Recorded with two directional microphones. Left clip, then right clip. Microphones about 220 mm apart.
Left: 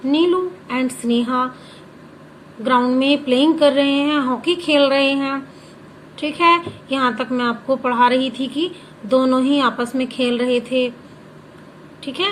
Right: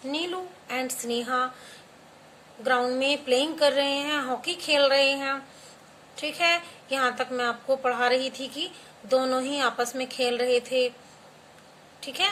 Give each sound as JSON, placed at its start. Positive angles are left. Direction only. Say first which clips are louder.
{"t": 0.1, "sound": "a sound", "louder": "left 14 dB", "side_deg": -15}
{"t": 2.6, "sound": "a woman's voice", "louder": "left 8 dB", "side_deg": -15}
{"t": 12.0, "sound": "a woman's voice", "louder": "left 5 dB", "side_deg": -15}